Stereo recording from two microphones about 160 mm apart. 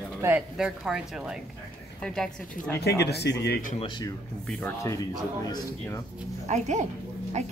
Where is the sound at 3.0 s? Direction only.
90° left; by 3.7 s 75° left (ahead or behind).